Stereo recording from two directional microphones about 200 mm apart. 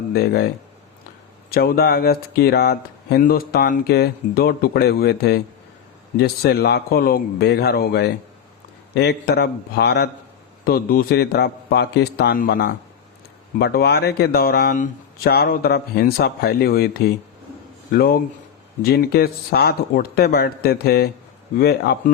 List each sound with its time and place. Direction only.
0.1 s speech: 50° left (ahead or behind)
1.5 s speech: 50° left (ahead or behind)